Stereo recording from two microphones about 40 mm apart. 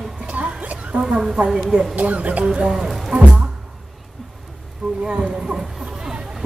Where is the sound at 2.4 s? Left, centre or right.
Right.